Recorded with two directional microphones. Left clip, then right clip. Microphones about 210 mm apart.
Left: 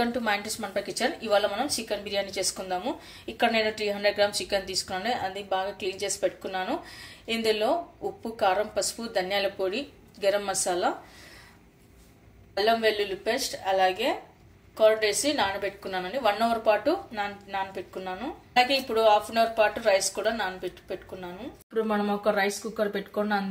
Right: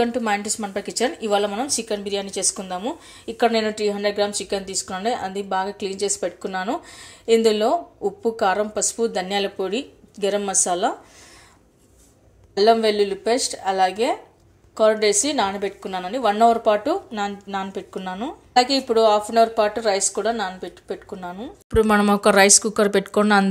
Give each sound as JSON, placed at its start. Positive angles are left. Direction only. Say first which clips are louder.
{"t": 0.0, "sound": "a woman's voice", "louder": "right 5 dB", "side_deg": -25}
{"t": 12.5, "sound": "a woman's voice", "louder": "right 7 dB", "side_deg": -35}
{"t": 21.6, "sound": "speech", "louder": "right 10 dB", "side_deg": -55}